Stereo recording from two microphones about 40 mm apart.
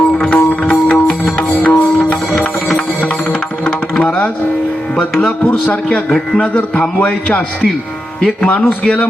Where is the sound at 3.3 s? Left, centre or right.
Left.